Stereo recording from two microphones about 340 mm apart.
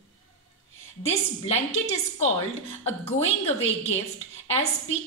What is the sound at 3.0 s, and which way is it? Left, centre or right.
A woman's voice, centre.